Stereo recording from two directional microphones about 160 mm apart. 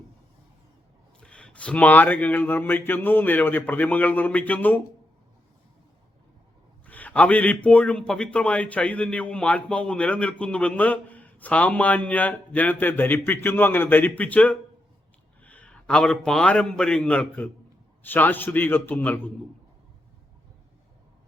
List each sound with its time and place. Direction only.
1.2 s a man's voice: 5° left (ahead or behind)
6.8 s a man's voice: 10° left (ahead or behind)